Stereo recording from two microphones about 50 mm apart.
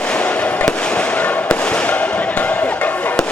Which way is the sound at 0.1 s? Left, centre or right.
Left.